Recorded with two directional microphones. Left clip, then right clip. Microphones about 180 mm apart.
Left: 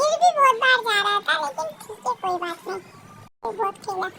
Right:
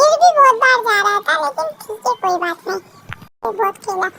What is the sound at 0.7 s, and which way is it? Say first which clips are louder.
Speech: right 6 dB; 50° right (ahead or behind).